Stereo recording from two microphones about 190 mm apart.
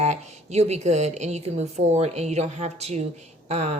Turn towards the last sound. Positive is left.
turn(degrees=-35)  # may be behind; listen again after turning